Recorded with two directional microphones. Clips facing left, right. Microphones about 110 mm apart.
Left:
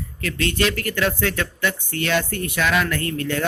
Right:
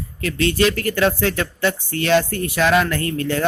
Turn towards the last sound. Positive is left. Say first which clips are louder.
# right 3 dB
turn(degrees=-30)  # may be behind; listen again after turning